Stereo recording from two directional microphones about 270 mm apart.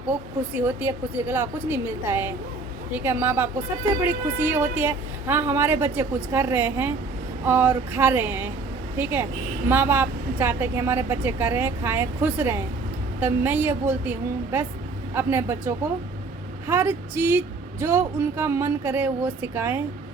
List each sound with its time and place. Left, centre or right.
0.6 s speech: centre
9.6 s speech: centre